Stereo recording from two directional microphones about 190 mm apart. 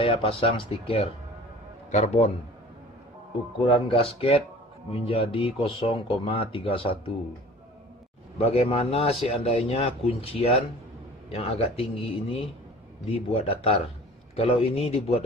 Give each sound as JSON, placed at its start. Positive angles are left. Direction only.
{"t": 0.0, "sound": "a man's voice", "side_deg": 30}
{"t": 3.6, "sound": "speech", "side_deg": 25}
{"t": 8.4, "sound": "a man's voice", "side_deg": 30}